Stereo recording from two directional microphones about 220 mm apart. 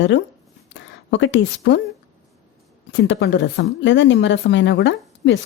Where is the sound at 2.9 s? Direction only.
60° left (ahead or behind).